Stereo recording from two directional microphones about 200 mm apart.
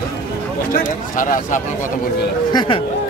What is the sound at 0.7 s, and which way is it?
Speech, 40° left (ahead or behind).